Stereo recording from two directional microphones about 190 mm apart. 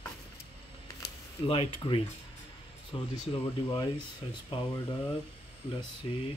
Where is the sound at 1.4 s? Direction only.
30° left (ahead or behind).